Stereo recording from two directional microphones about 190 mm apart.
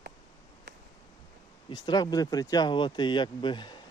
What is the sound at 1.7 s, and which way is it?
Speech, 20° left (ahead or behind).